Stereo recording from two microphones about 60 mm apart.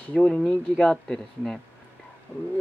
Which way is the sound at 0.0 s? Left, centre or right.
Left.